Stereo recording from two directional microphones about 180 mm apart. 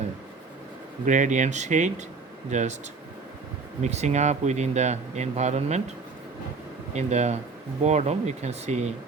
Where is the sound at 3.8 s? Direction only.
40° right (ahead or behind).